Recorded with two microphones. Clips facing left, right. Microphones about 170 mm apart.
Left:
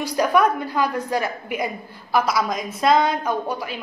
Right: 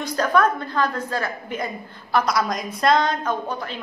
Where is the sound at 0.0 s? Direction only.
10° left (ahead or behind).